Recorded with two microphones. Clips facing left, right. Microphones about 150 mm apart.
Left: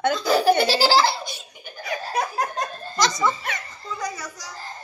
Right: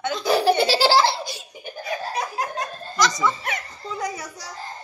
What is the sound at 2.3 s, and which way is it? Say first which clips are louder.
Laughter: left 1 dB; 40° left (ahead or behind).